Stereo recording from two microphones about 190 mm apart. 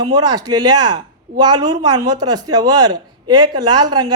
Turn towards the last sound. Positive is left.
turn(degrees=-20)  # may be behind; listen again after turning